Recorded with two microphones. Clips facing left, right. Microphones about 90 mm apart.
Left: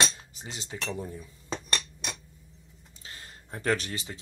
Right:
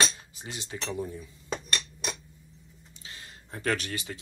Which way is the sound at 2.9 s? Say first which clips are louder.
Even; 40° left (ahead or behind).